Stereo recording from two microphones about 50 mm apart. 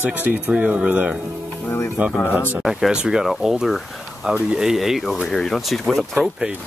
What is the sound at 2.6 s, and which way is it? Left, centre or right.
Speech, centre.